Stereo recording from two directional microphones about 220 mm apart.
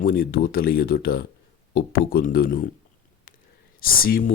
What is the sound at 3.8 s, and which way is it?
Speech, 40° left (ahead or behind).